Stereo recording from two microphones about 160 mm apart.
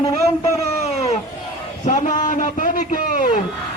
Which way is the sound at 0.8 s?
40° left (ahead or behind).